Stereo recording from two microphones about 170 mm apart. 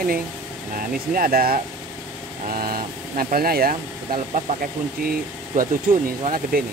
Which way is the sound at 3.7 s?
45° right (ahead or behind).